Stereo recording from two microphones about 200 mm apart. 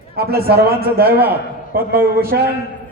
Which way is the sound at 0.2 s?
50° right (ahead or behind).